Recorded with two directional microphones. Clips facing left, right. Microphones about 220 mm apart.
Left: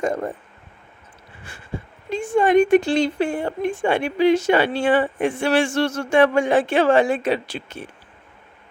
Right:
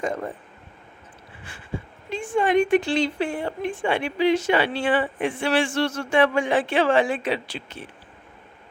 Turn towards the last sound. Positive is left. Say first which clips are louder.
# left 4 dB
turn(degrees=45)  # may be behind; listen again after turning